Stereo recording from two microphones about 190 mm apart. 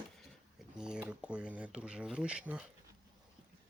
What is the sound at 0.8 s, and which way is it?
Speech, 5° right (ahead or behind).